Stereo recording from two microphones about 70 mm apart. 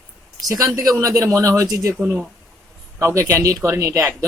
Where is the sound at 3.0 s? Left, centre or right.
Right.